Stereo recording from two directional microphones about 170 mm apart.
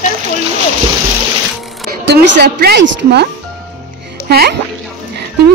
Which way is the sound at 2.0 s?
90° right.